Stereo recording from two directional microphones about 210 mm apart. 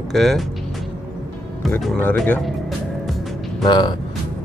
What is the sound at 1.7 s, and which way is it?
Speech, 5° left (ahead or behind).